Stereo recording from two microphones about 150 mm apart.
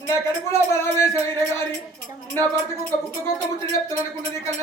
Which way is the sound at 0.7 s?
15° left (ahead or behind).